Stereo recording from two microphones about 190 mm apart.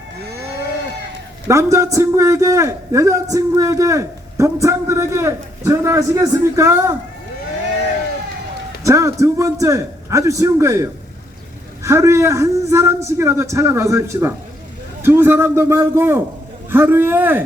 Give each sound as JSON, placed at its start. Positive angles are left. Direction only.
{"t": 1.5, "sound": "a man's voice", "side_deg": -15}
{"t": 8.8, "sound": "a man's voice", "side_deg": -15}